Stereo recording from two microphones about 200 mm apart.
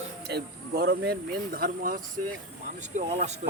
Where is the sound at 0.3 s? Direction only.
55° right (ahead or behind).